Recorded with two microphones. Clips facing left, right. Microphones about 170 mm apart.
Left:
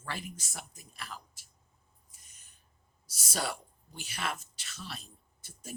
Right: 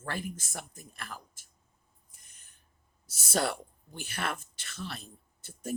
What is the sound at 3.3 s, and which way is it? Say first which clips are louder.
A woman's voice: right 5 dB; 55° right (ahead or behind).